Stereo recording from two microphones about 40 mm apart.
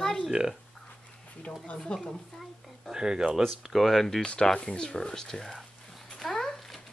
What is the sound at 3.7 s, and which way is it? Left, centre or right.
Speech, centre.